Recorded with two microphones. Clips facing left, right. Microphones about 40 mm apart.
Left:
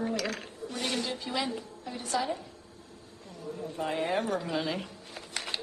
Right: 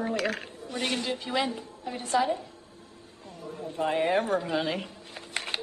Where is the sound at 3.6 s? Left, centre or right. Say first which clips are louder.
Right 5 dB; centre.